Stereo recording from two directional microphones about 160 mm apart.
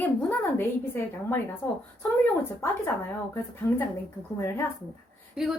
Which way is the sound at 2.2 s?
15° left (ahead or behind).